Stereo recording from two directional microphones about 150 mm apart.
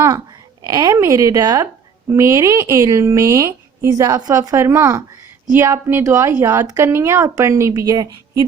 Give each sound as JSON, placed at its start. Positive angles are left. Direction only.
{"t": 0.6, "sound": "a woman's voice", "side_deg": -25}